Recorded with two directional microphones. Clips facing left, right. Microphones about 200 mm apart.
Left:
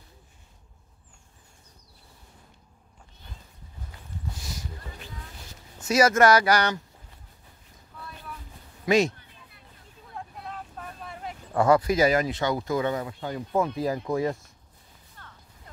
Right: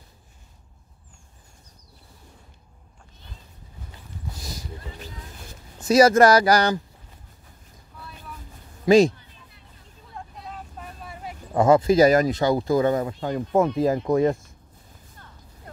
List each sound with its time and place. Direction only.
4.3 s music: 35° right (ahead or behind)
5.8 s speech: 35° right (ahead or behind)
8.8 s speech: 30° right (ahead or behind)
10.1 s vehicle: centre (ahead or behind)
11.5 s speech: 20° right (ahead or behind)
12.0 s speech: 40° right (ahead or behind)
15.2 s music: 15° right (ahead or behind)